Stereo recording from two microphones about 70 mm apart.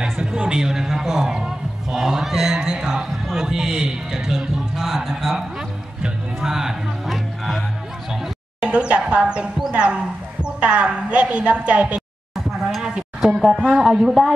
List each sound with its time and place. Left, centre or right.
0.2 s a man's voice: centre
6.0 s music: centre
8.1 s a man's voice: centre
12.4 s a sound: centre
12.8 s a sound: centre
13.3 s speech: centre